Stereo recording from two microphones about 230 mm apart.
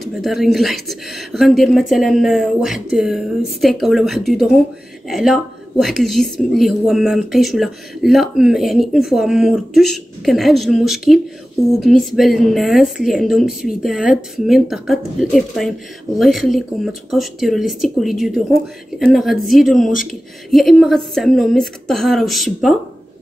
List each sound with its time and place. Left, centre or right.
0.0 s a woman's voice: centre